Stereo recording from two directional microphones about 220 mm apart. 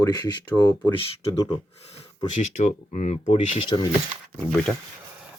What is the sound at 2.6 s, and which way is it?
Speech, 35° left (ahead or behind).